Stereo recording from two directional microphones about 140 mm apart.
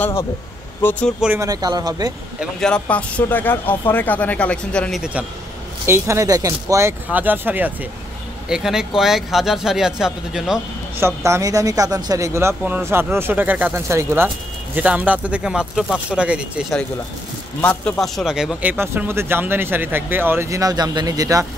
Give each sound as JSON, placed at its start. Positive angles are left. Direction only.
{"t": 0.0, "sound": "speech", "side_deg": 20}
{"t": 1.4, "sound": "speech", "side_deg": -25}
{"t": 2.6, "sound": "speech", "side_deg": 10}
{"t": 5.9, "sound": "speech", "side_deg": -20}
{"t": 11.0, "sound": "speech", "side_deg": -20}
{"t": 17.6, "sound": "speech", "side_deg": 5}